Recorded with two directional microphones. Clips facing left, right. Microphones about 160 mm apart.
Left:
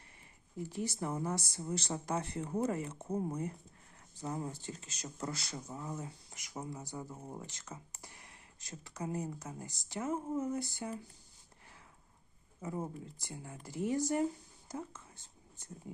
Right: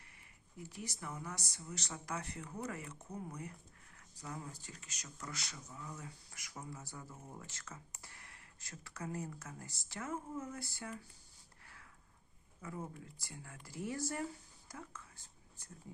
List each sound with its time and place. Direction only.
0.7 s speech: 30° left (ahead or behind)
12.6 s speech: 25° left (ahead or behind)
14.7 s whispering: 25° left (ahead or behind)